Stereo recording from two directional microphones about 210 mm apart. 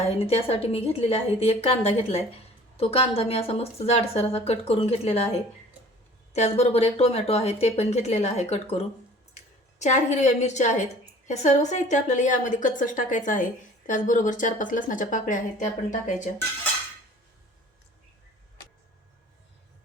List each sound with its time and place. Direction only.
0.2 s a woman's voice: 30° left (ahead or behind)
6.3 s a woman's voice: 30° left (ahead or behind)